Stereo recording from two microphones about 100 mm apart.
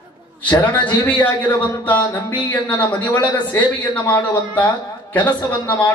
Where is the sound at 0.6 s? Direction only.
15° left (ahead or behind).